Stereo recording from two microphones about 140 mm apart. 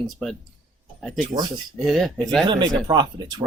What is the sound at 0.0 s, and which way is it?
Speech, centre (ahead or behind).